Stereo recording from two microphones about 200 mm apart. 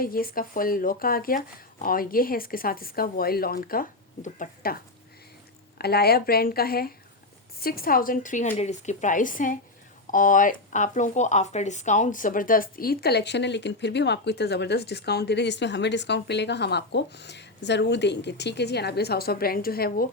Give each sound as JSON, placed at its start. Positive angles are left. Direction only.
{"t": 0.0, "sound": "a woman's voice", "side_deg": 45}